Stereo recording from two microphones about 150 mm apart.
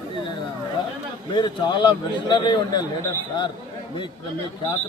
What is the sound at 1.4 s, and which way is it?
A man's voice, 30° left (ahead or behind).